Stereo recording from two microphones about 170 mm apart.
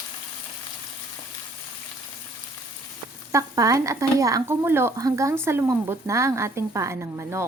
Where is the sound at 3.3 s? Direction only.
20° right (ahead or behind).